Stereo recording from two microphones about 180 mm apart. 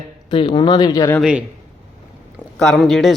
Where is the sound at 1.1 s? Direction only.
5° right (ahead or behind).